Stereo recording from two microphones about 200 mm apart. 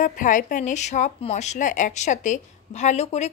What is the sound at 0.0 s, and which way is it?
A woman's voice, 40° left (ahead or behind).